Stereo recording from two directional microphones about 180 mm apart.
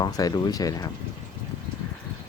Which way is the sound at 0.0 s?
20° left (ahead or behind).